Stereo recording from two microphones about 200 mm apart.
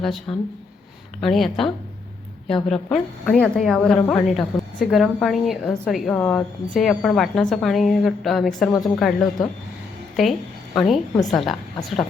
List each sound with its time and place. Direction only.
0.0 s a woman's voice: centre (ahead or behind)
10.8 s a woman's voice: centre (ahead or behind)